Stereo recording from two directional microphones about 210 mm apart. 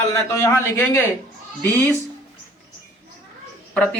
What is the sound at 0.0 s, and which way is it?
A man's voice, 15° left (ahead or behind).